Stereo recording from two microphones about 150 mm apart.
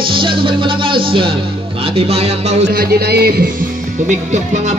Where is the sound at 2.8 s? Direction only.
90° right.